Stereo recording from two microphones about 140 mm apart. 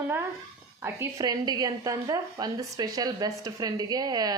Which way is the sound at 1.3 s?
30° right (ahead or behind).